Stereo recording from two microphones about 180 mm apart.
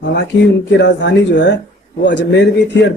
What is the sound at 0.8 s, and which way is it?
Speech, 80° left.